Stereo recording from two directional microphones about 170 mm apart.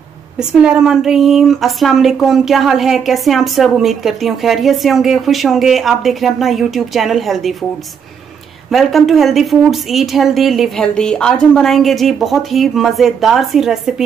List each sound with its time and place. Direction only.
0.4 s speech: 5° right (ahead or behind)
8.7 s speech: centre (ahead or behind)